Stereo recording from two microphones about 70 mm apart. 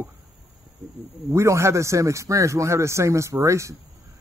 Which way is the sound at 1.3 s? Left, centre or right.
Right.